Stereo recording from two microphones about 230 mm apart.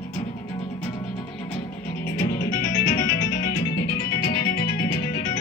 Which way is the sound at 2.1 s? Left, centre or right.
Left.